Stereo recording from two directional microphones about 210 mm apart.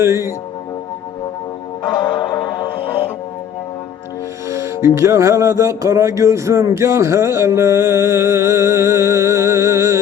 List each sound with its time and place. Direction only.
0.0 s speech: 10° right (ahead or behind)
1.8 s music: 20° left (ahead or behind)
4.4 s music: 15° right (ahead or behind)
4.9 s speech: 15° right (ahead or behind)